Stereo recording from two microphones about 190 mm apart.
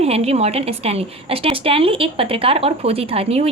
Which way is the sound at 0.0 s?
35° right (ahead or behind).